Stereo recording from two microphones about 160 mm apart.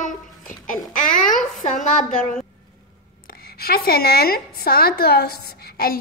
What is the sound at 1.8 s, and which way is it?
Speech, 50° left (ahead or behind).